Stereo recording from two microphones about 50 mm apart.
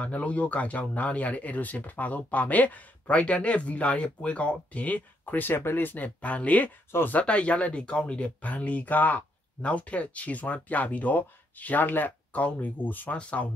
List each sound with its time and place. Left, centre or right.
0.0 s speech: left
6.0 s speech: left
6.9 s speech: left
7.2 s speech: left
13.2 s speech: left